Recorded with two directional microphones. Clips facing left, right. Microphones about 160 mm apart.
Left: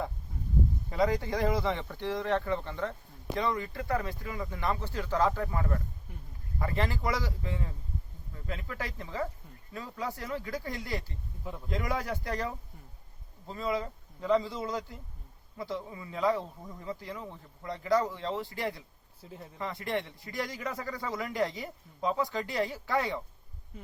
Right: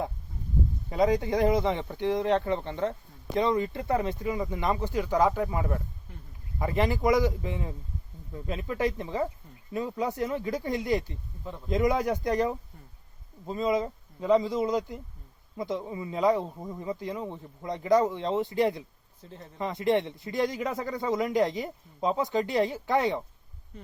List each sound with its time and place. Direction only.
0.9 s speech: 20° right (ahead or behind)
19.2 s speech: 5° left (ahead or behind)
19.5 s speech: 20° right (ahead or behind)
23.7 s hum: 5° left (ahead or behind)